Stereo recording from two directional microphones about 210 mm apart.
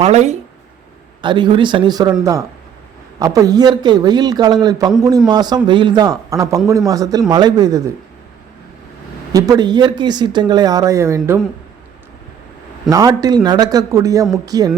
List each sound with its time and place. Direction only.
0.0 s a man's voice: 30° right (ahead or behind); by 7.9 s 15° right (ahead or behind)
9.3 s speech: 20° right (ahead or behind)
12.9 s a man's voice: 15° right (ahead or behind)